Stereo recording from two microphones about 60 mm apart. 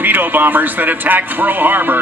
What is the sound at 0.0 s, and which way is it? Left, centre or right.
Speech, right.